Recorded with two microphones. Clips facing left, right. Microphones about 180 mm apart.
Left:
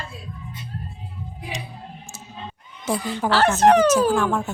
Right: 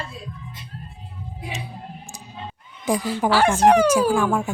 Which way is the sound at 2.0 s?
15° right (ahead or behind).